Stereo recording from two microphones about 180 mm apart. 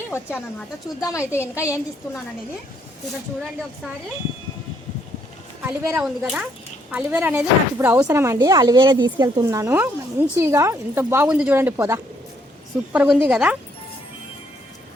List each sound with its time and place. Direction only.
0.1 s a woman's voice: 15° left (ahead or behind)
5.6 s speech: 10° right (ahead or behind)
6.2 s a woman's voice: centre (ahead or behind)
12.9 s a woman's voice: 5° right (ahead or behind)